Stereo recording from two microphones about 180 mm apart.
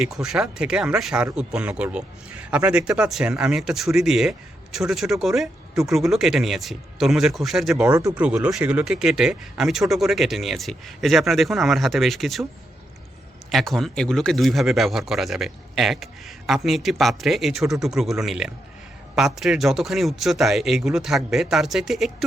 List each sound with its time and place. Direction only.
0.0 s speech: 5° right (ahead or behind)
13.5 s speech: centre (ahead or behind)